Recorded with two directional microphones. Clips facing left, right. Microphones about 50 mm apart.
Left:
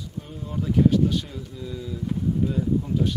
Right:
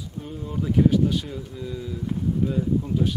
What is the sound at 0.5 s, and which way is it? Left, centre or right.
Speech, centre.